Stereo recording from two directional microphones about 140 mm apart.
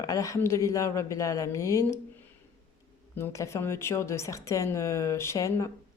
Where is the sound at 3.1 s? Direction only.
20° left (ahead or behind).